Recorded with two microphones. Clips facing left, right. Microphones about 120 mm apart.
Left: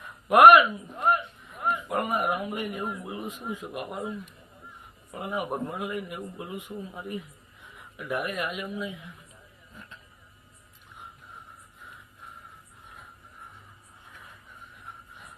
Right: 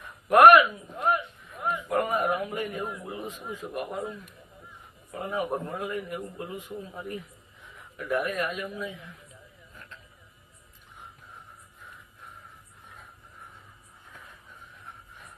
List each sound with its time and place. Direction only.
0.3 s a man's voice: 15° left (ahead or behind)
1.1 s a sound: centre (ahead or behind)
2.0 s a man's voice: 15° left (ahead or behind)